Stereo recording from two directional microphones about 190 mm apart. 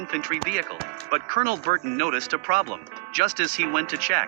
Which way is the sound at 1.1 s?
45° right (ahead or behind).